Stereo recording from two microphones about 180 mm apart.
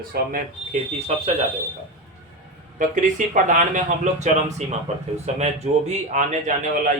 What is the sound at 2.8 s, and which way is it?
A man's voice, 45° right (ahead or behind).